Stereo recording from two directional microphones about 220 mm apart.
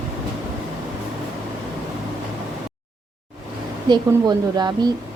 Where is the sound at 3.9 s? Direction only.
20° right (ahead or behind).